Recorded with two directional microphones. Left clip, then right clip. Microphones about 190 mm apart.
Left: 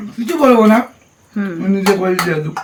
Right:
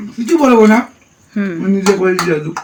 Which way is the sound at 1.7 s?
15° left (ahead or behind).